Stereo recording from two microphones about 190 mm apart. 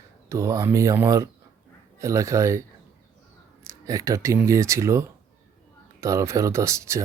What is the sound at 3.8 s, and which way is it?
Speech, 15° right (ahead or behind).